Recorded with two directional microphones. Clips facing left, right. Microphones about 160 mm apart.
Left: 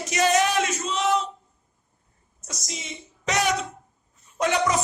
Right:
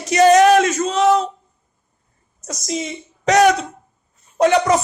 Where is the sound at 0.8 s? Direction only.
45° right (ahead or behind).